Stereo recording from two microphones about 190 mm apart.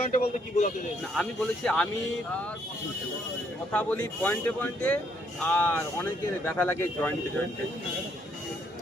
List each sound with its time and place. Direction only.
0.0 s speech: 40° left (ahead or behind)
1.1 s speech: 5° left (ahead or behind)
3.7 s speech: 5° left (ahead or behind)